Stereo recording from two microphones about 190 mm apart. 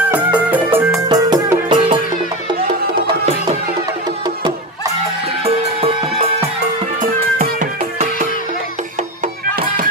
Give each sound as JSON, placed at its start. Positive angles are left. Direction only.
{"t": 0.1, "sound": "music", "side_deg": -10}
{"t": 1.0, "sound": "music", "side_deg": -20}
{"t": 5.4, "sound": "music", "side_deg": -30}
{"t": 7.0, "sound": "music", "side_deg": -45}